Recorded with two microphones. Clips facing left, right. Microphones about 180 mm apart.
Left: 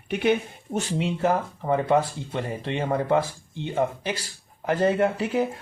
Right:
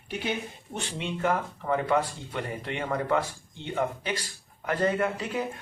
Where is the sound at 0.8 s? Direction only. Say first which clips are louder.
Left 6 dB; 35° left (ahead or behind).